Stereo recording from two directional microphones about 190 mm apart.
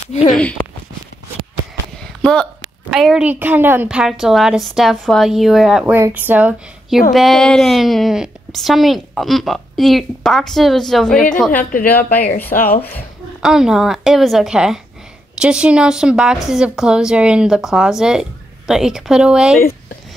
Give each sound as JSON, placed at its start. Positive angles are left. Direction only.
{"t": 0.3, "sound": "speech", "side_deg": 5}
{"t": 2.9, "sound": "speech", "side_deg": 0}
{"t": 12.5, "sound": "speech", "side_deg": 50}
{"t": 13.4, "sound": "speech", "side_deg": -5}